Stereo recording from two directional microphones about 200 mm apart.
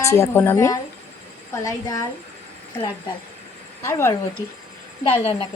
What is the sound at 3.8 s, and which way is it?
Speech, 10° left (ahead or behind).